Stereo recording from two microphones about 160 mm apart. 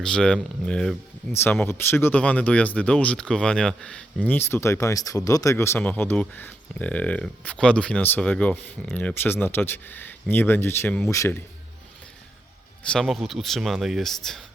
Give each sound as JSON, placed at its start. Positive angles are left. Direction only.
{"t": 0.0, "sound": "speech", "side_deg": 5}
{"t": 12.9, "sound": "speech", "side_deg": 0}